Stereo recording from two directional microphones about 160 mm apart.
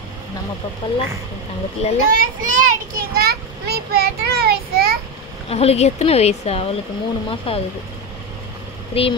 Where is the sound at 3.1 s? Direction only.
75° right (ahead or behind).